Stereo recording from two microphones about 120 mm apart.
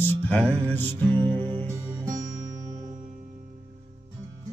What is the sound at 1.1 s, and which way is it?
Music, 40° right (ahead or behind).